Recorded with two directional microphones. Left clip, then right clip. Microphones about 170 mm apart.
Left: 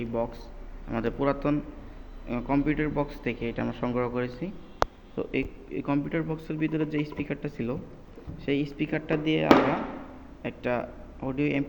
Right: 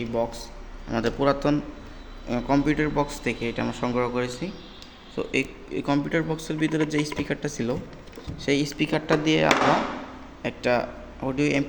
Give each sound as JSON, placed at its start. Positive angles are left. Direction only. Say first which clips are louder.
{"t": 0.0, "sound": "a man's voice", "louder": "right 4 dB", "side_deg": -15}
{"t": 0.9, "sound": "a man's voice", "louder": "right 4 dB", "side_deg": -25}